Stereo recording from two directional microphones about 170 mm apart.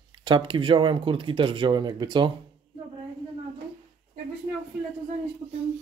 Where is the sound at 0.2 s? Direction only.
30° right (ahead or behind).